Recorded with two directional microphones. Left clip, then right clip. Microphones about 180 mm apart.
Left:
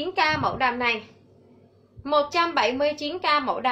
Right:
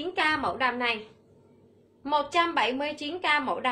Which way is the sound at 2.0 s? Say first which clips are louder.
Left 3 dB; 15° right (ahead or behind).